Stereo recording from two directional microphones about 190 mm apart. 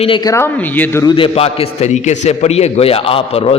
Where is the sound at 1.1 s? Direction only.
30° left (ahead or behind).